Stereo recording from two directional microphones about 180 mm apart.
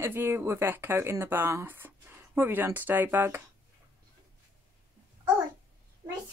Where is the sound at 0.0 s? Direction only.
15° right (ahead or behind).